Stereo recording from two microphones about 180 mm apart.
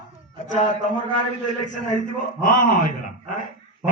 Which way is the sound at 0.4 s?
45° left (ahead or behind).